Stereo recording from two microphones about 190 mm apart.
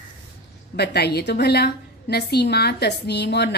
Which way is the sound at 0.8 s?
60° left (ahead or behind).